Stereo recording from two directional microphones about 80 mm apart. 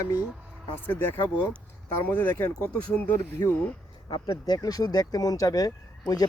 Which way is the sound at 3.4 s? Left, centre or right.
Left.